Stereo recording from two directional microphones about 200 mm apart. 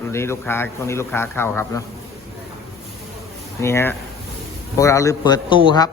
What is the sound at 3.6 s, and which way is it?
A man's voice, 15° left (ahead or behind).